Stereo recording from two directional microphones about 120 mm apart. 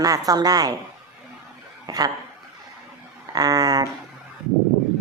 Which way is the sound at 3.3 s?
30° right (ahead or behind).